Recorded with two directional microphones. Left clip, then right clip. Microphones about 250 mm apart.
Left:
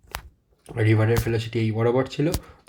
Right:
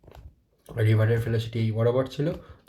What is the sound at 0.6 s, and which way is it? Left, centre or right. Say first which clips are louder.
Speech: left 4 dB; left.